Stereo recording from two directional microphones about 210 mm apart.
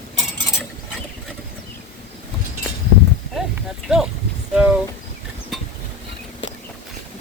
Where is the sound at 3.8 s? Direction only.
Centre (ahead or behind).